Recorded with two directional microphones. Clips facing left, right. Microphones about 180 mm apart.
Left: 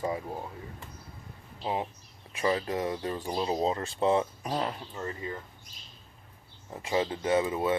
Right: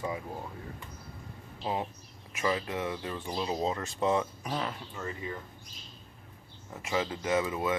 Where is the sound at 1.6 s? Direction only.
20° left (ahead or behind).